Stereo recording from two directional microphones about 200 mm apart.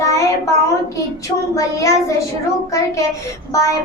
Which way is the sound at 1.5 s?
15° left (ahead or behind).